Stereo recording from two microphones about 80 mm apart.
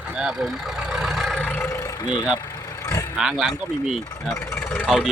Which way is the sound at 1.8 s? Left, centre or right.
Left.